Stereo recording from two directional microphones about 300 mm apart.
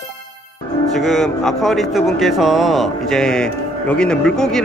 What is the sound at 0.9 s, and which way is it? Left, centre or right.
A man's voice, centre.